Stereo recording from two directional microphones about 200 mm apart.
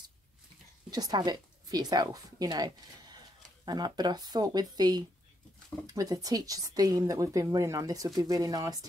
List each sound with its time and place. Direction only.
0.8 s a woman's voice: 20° right (ahead or behind)